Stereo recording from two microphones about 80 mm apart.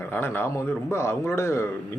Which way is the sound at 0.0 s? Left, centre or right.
Left.